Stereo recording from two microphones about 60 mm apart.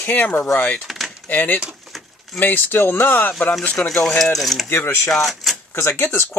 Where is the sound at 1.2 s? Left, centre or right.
Left.